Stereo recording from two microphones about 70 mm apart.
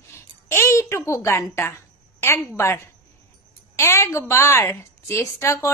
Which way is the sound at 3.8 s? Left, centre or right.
Left.